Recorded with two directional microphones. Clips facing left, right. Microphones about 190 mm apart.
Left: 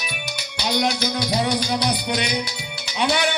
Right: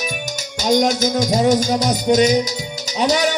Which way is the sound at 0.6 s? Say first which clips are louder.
Right 7 dB; 45° right (ahead or behind).